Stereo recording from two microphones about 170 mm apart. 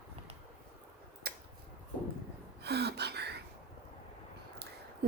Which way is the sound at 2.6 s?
75° right (ahead or behind).